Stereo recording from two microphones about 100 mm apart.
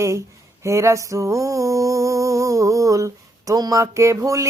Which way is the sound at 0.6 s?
30° right (ahead or behind).